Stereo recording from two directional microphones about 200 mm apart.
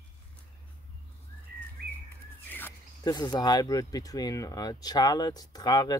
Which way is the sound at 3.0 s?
20° left (ahead or behind).